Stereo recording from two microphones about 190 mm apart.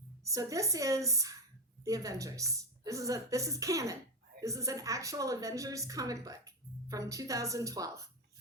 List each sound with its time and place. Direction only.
0.3 s a woman's voice: 15° right (ahead or behind)